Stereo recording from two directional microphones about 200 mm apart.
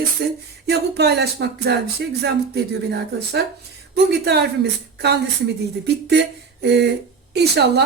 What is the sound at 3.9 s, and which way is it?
Speech, 55° right (ahead or behind).